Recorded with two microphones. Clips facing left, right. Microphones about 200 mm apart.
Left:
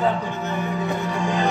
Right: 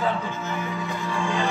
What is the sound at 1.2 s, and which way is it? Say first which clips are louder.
Speech: left 3 dB; 40° left (ahead or behind).